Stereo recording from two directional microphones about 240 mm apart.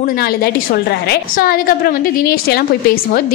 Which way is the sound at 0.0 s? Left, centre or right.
Left.